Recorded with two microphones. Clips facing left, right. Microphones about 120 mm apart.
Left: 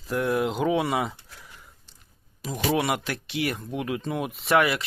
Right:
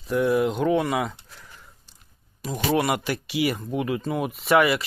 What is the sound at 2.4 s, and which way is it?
Speech, centre (ahead or behind).